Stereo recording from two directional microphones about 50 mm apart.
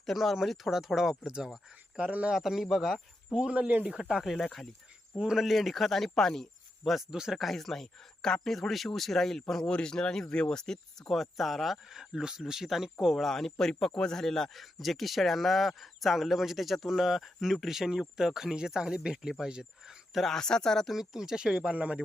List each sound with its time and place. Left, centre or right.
0.0 s speech: centre; by 2.3 s right
2.3 s speech: centre
3.5 s speech: right
3.8 s speech: centre
4.2 s speech: centre
5.1 s speech: centre
5.5 s speech: centre
7.1 s speech: centre
11.1 s speech: centre
13.7 s speech: centre
14.5 s speech: centre
20.1 s speech: centre
20.9 s speech: centre; by 22.0 s right